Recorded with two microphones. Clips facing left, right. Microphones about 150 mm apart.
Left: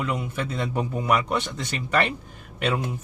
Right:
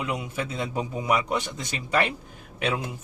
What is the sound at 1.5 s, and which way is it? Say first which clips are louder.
Speech: left 2 dB; 15° right (ahead or behind).